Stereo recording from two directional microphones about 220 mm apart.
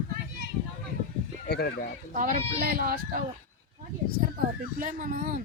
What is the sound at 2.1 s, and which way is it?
Speech, 30° right (ahead or behind).